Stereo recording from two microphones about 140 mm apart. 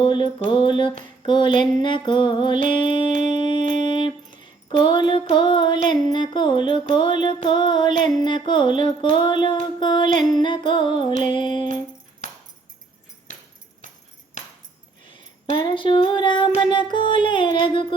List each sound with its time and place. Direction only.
0.0 s mantra: 35° left (ahead or behind)
0.5 s music: 35° left (ahead or behind)
15.5 s music: 35° left (ahead or behind)